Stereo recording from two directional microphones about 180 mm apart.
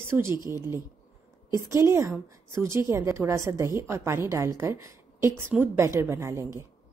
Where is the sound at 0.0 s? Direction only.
15° right (ahead or behind).